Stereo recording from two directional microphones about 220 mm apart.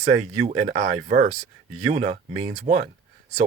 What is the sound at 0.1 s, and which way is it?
Speech, 30° right (ahead or behind).